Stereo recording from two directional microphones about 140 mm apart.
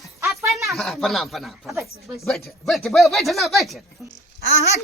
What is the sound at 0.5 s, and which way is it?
Speech, centre (ahead or behind).